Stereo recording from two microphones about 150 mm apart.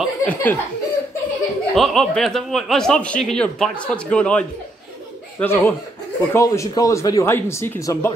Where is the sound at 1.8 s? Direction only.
Centre (ahead or behind).